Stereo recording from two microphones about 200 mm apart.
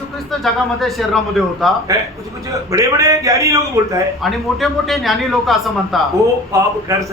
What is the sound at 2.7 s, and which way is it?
Speech, 15° right (ahead or behind).